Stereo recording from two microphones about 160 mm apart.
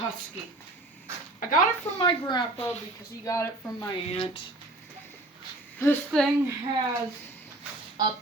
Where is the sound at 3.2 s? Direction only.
20° left (ahead or behind).